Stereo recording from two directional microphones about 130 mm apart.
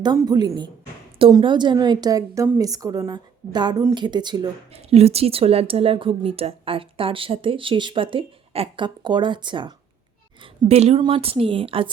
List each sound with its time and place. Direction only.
0.3 s a woman's voice: 30° right (ahead or behind)
4.7 s a woman's voice: 50° right (ahead or behind); by 9.7 s 35° right (ahead or behind)
10.7 s a woman's voice: 50° right (ahead or behind)